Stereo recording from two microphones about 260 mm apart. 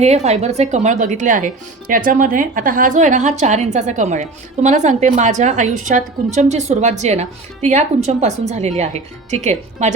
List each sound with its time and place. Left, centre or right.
0.0 s speech: right